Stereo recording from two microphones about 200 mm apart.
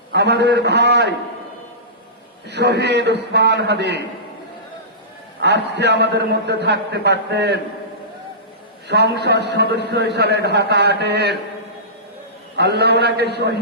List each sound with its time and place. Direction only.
0.1 s a man's voice: 55° right (ahead or behind)
2.5 s a man's voice: 55° right (ahead or behind)
5.4 s a man's voice: 60° right (ahead or behind)
9.2 s a man's voice: 55° right (ahead or behind)
12.5 s a man's voice: 55° right (ahead or behind)